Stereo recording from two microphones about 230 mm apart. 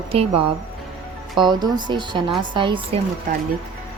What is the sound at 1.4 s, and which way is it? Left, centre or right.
Speech, centre.